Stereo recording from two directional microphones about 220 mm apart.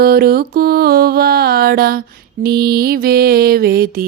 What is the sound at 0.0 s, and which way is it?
Mantra, 45° right (ahead or behind).